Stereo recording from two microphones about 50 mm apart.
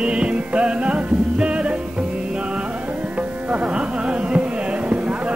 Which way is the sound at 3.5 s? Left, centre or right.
Right.